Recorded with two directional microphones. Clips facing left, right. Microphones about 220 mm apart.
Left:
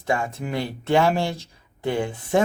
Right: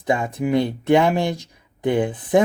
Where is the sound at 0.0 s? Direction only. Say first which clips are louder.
Right 4 dB; 15° right (ahead or behind).